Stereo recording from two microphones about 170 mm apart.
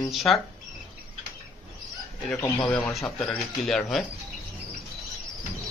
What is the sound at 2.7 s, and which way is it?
Speech, 10° left (ahead or behind).